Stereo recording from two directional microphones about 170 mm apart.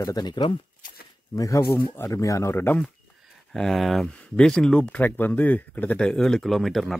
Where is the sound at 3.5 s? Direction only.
Centre (ahead or behind).